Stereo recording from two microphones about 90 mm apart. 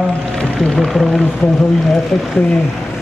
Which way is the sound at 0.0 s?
5° left (ahead or behind).